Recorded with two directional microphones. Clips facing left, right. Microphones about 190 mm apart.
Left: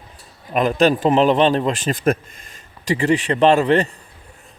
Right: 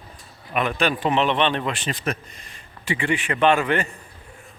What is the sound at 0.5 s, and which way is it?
A man's voice, 40° left (ahead or behind).